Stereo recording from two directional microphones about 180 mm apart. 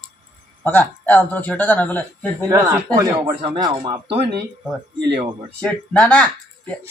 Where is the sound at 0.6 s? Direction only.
10° left (ahead or behind).